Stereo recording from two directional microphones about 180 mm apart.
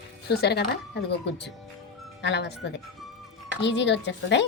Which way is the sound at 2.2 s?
75° left (ahead or behind).